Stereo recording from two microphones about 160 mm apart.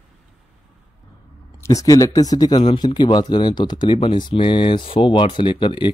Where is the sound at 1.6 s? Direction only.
20° left (ahead or behind).